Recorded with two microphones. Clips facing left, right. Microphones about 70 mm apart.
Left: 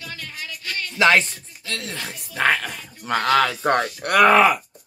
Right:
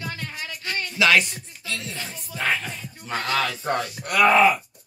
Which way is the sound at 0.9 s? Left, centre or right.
Left.